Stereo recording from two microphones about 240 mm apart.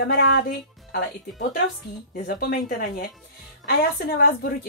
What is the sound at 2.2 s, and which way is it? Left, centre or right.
Speech, left.